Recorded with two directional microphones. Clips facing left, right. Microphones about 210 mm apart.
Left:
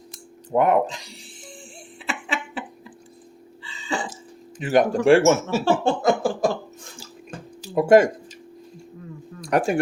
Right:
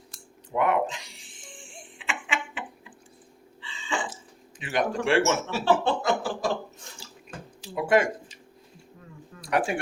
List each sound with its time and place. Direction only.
0.5 s music: 40° left (ahead or behind)
3.6 s burping: 40° left (ahead or behind)
4.5 s speech: 45° left (ahead or behind)
7.6 s speech: 45° left (ahead or behind)
9.5 s speech: 40° left (ahead or behind)